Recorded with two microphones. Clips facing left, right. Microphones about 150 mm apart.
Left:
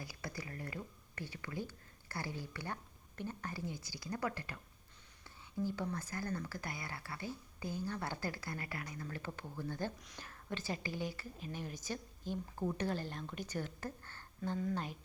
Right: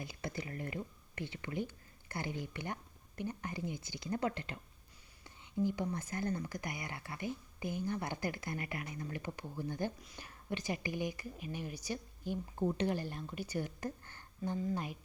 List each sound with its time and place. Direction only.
0.0 s a woman's voice: 25° right (ahead or behind)